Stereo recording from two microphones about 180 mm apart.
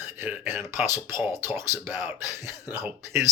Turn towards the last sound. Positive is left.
turn(degrees=-15)  # may be behind; listen again after turning